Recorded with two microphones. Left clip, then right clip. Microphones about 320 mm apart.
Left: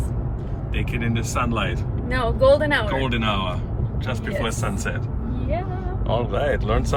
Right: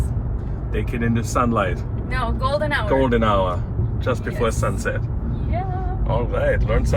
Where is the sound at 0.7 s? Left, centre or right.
Centre.